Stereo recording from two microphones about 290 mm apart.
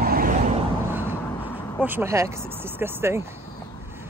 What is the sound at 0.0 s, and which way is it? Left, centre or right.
Vehicle, right.